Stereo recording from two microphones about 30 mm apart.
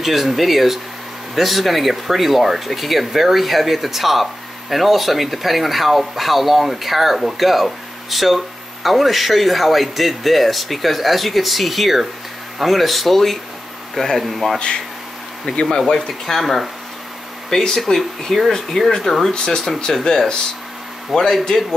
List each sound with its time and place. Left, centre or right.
0.0 s speech: centre
15.5 s speech: left
16.1 s speech: centre
17.5 s speech: centre
17.9 s speech: centre
18.5 s speech: centre
19.3 s speech: left
19.9 s speech: centre